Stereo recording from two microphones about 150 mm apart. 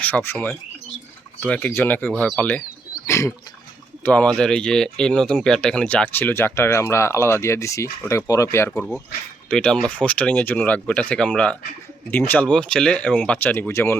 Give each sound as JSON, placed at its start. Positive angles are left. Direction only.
{"t": 0.0, "sound": "speech", "side_deg": 10}
{"t": 3.1, "sound": "a sound", "side_deg": 20}
{"t": 4.0, "sound": "speech", "side_deg": 10}
{"t": 8.7, "sound": "speech", "side_deg": 5}